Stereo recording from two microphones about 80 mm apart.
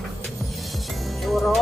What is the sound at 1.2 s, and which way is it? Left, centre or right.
Music, centre.